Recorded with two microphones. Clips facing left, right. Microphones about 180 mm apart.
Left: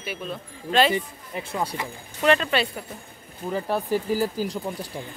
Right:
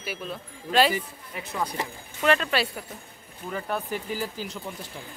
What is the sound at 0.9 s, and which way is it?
Speech, 30° left (ahead or behind).